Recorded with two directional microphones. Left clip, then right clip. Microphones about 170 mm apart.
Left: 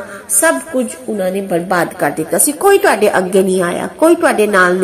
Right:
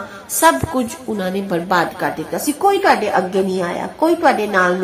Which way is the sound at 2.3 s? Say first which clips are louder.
Left 5 dB; 30° left (ahead or behind).